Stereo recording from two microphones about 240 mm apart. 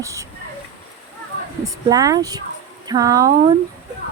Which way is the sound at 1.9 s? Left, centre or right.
Centre.